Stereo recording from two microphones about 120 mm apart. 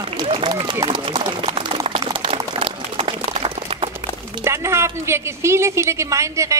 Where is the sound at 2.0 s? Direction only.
35° right (ahead or behind).